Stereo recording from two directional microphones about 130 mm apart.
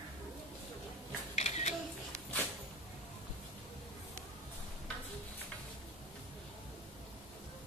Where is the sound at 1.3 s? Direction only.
55° left (ahead or behind).